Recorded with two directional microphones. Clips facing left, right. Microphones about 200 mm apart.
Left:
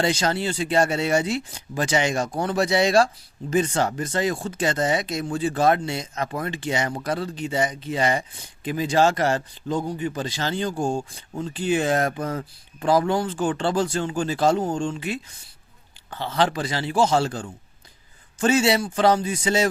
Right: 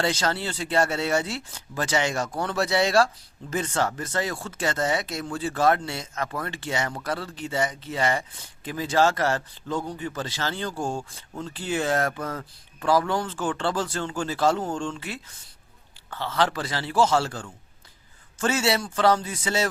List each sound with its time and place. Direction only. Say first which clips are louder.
0.0 s speech: left 3 dB; 15° left (ahead or behind)